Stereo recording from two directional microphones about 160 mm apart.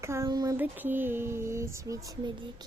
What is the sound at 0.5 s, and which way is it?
A child's voice, 10° right (ahead or behind).